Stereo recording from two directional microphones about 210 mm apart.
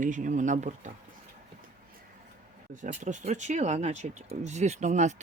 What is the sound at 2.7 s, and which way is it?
Speech, 35° right (ahead or behind).